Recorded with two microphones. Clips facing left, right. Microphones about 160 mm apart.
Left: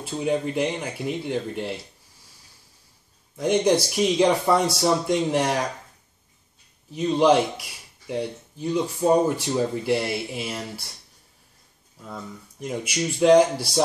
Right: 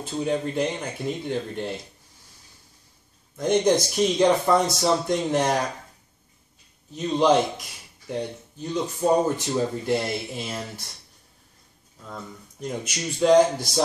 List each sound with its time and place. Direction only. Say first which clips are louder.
0.0 s speech: left 1 dB; 10° left (ahead or behind)
3.3 s speech: even; 10° left (ahead or behind)
6.9 s speech: left 1 dB; 10° left (ahead or behind)
12.1 s speech: left 1 dB; 10° left (ahead or behind)